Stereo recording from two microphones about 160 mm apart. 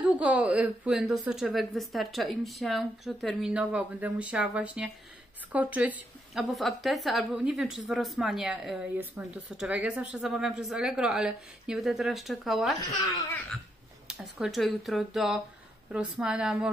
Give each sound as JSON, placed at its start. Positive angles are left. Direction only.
{"t": 0.2, "sound": "a woman's voice", "side_deg": -5}
{"t": 14.0, "sound": "a woman's voice", "side_deg": 0}